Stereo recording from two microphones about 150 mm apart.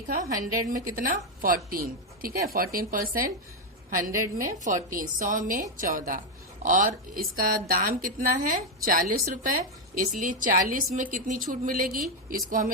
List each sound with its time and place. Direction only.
0.2 s a woman's voice: 65° right (ahead or behind)